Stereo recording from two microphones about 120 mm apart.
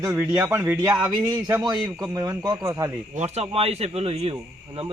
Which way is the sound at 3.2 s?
60° right (ahead or behind).